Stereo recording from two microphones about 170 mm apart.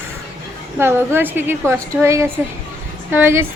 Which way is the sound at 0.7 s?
15° right (ahead or behind).